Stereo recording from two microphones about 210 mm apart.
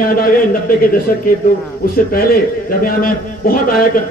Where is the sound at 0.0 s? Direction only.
40° left (ahead or behind).